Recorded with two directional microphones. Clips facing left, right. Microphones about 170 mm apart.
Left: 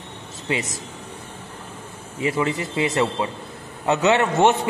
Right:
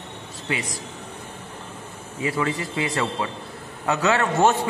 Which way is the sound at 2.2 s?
20° left (ahead or behind).